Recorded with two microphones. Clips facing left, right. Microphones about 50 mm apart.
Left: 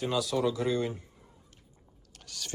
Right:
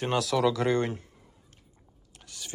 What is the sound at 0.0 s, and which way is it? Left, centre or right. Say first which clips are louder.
Speech: right 3 dB; right.